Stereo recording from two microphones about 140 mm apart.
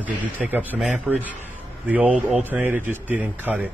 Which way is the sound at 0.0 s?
10° right (ahead or behind).